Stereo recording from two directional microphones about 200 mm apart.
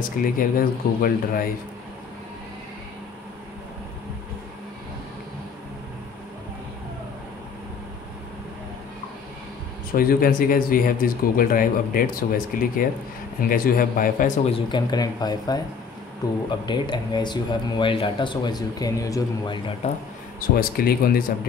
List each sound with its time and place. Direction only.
0.2 s speech: 45° left (ahead or behind)
9.9 s speech: 45° left (ahead or behind)
14.5 s speech: 20° left (ahead or behind)
19.8 s speech: 35° left (ahead or behind)
20.3 s speech: 45° left (ahead or behind)